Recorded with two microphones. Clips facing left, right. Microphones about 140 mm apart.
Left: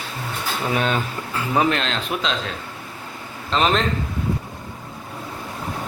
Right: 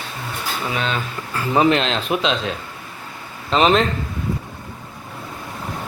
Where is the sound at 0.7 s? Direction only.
45° left (ahead or behind).